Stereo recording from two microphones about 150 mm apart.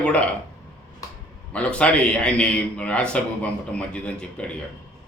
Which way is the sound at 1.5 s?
10° left (ahead or behind).